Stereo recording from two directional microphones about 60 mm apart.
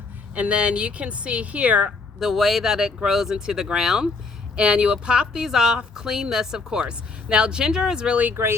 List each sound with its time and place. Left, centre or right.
0.3 s speech: right
2.1 s speech: centre